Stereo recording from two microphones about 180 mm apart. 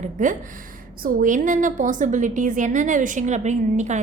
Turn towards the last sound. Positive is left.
turn(degrees=-40)  # may be behind; listen again after turning